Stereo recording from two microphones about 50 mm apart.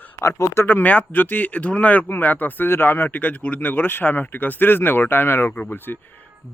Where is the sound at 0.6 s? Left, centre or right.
Left.